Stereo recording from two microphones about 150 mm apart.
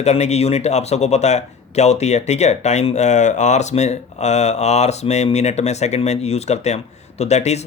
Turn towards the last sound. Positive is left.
turn(degrees=50)  # may be behind; listen again after turning